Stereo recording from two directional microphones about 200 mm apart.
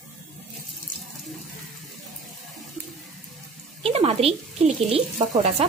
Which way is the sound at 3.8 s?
30° right (ahead or behind).